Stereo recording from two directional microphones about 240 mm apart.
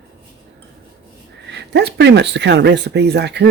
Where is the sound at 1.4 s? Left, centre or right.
Right.